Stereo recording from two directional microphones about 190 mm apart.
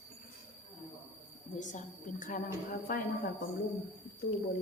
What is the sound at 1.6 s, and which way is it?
A woman's voice, 40° left (ahead or behind).